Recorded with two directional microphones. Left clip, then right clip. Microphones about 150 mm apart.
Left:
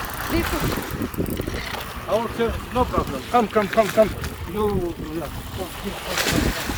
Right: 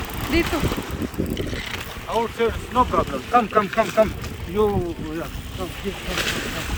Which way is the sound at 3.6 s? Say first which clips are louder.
Left 2 dB; 20° left (ahead or behind).